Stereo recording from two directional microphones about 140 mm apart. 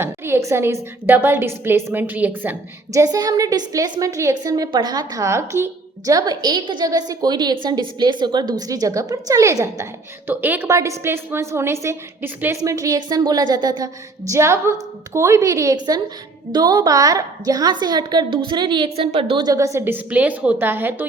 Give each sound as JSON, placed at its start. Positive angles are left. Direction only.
{"t": 0.0, "sound": "a woman's voice", "side_deg": -20}